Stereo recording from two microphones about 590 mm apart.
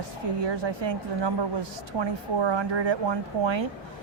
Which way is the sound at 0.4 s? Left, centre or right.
Right.